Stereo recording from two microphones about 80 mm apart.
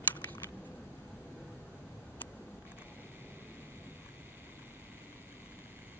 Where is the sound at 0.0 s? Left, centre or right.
Left.